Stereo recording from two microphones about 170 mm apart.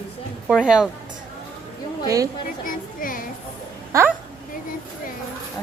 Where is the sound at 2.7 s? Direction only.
55° left (ahead or behind).